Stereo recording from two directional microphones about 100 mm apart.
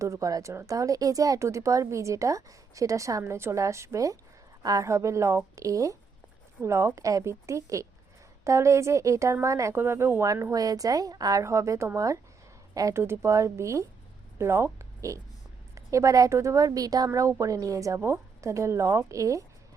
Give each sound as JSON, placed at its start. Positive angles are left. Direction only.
{"t": 0.0, "sound": "a woman's voice", "side_deg": -30}